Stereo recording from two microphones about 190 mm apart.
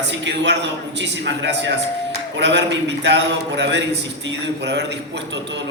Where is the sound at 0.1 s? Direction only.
70° right (ahead or behind).